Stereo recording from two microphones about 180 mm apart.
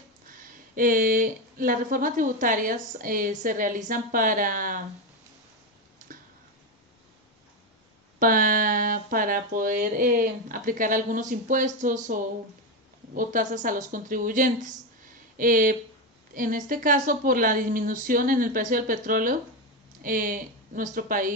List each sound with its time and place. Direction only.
0.3 s speech: 50° right (ahead or behind)
8.2 s speech: 50° right (ahead or behind)